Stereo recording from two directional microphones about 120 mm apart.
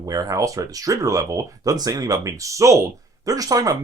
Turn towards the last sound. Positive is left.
turn(degrees=-30)  # may be behind; listen again after turning